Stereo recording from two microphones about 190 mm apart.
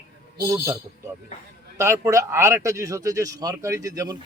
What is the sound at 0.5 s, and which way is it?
Speech, 15° right (ahead or behind).